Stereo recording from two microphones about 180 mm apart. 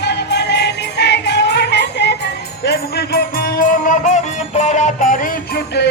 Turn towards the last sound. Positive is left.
turn(degrees=45)  # may be behind; listen again after turning